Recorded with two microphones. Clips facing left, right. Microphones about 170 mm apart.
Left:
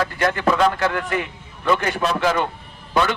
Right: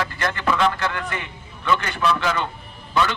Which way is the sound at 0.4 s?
40° left (ahead or behind).